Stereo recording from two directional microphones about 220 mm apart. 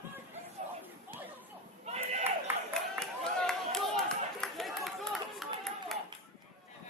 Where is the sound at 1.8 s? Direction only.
30° right (ahead or behind).